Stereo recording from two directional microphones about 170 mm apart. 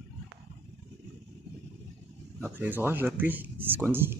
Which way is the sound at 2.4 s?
10° right (ahead or behind).